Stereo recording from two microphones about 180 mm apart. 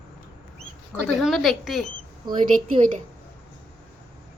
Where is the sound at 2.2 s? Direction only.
25° right (ahead or behind).